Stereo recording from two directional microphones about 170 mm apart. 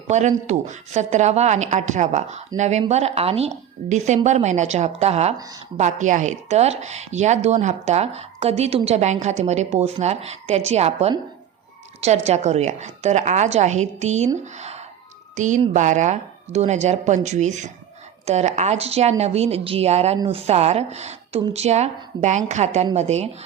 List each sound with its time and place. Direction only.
0.1 s a woman's voice: 45° right (ahead or behind)
15.4 s a woman's voice: 45° right (ahead or behind)